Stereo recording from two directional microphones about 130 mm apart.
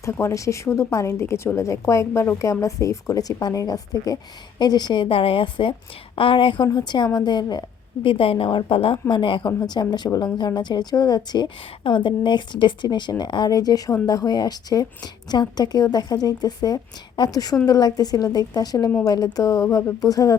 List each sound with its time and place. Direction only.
0.0 s speech: 25° left (ahead or behind)
8.0 s a woman's voice: 45° left (ahead or behind)
9.5 s speech: 25° left (ahead or behind)